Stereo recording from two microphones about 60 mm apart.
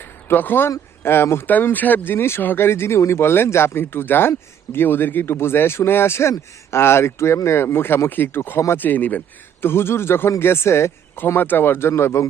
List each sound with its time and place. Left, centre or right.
0.0 s a sound: left
1.0 s speech: left
1.5 s speech: left
8.8 s speech: left
9.6 s speech: left